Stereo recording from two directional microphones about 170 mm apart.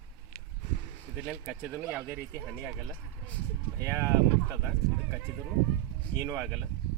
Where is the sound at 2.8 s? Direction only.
10° left (ahead or behind).